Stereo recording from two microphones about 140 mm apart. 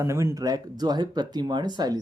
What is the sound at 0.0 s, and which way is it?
Speech, 20° right (ahead or behind).